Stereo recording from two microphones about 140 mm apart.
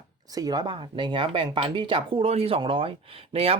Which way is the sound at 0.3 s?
30° right (ahead or behind).